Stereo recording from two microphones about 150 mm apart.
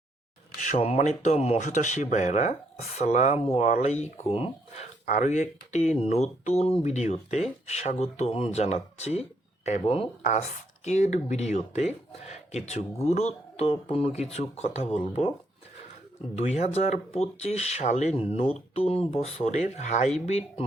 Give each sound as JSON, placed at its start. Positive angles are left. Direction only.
{"t": 0.6, "sound": "speech", "side_deg": 45}
{"t": 16.3, "sound": "speech", "side_deg": 50}